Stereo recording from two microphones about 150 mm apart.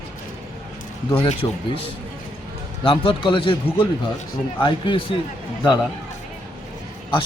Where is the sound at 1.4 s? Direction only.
20° left (ahead or behind).